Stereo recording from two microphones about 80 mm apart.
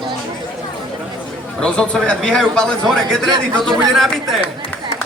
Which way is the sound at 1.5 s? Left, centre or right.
Centre.